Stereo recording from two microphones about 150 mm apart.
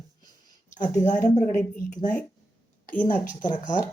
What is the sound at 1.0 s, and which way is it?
Speech, 55° left (ahead or behind).